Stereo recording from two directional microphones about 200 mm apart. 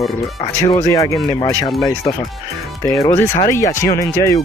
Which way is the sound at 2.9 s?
15° left (ahead or behind).